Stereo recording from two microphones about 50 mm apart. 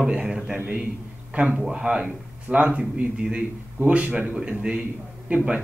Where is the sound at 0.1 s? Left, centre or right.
Centre.